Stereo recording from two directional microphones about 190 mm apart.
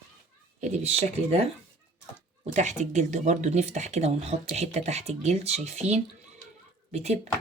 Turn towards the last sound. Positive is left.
turn(degrees=-35)  # may be behind; listen again after turning